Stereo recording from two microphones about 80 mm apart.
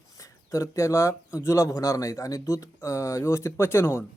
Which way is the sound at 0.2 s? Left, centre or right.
Left.